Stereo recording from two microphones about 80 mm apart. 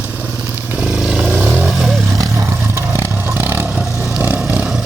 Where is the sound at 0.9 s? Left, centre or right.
Centre.